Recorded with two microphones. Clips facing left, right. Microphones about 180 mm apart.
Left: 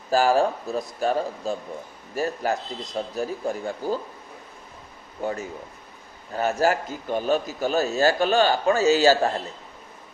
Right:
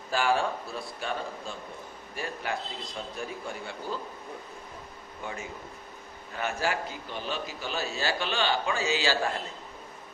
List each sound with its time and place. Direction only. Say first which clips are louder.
0.1 s speech: left 7 dB; 40° left (ahead or behind)
5.2 s a man's voice: left 9 dB; 40° left (ahead or behind)